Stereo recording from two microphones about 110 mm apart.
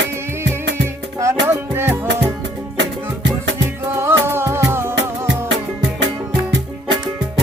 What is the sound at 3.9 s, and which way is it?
Music, 20° right (ahead or behind).